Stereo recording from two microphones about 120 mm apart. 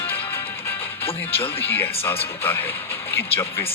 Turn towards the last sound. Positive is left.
turn(degrees=15)  # may be behind; listen again after turning